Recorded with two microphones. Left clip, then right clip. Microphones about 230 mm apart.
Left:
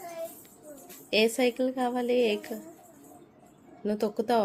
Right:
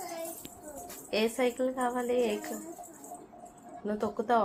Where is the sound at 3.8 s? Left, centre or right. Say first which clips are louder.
Left 2 dB; left.